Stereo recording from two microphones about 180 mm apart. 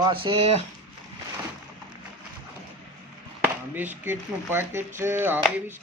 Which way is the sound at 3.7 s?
10° right (ahead or behind).